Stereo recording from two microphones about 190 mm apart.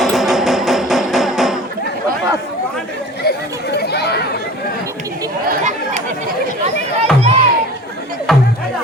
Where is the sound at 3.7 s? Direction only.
60° left (ahead or behind).